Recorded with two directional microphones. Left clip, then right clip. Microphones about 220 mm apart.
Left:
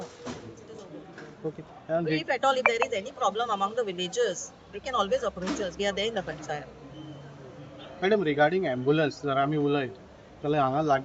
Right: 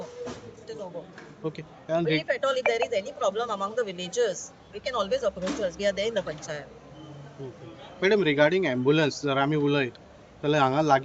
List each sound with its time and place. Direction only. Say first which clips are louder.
2.0 s speech: left 1 dB; centre (ahead or behind)
8.0 s speech: right 2 dB; 50° right (ahead or behind)